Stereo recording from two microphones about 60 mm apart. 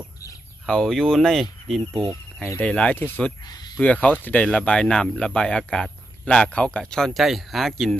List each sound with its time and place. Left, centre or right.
0.7 s speech: centre
2.6 s speech: centre